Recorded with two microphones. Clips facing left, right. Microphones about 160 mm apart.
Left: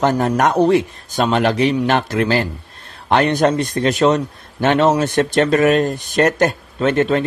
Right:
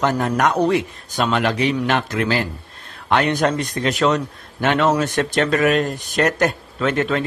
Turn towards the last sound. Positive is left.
turn(degrees=30)  # may be behind; listen again after turning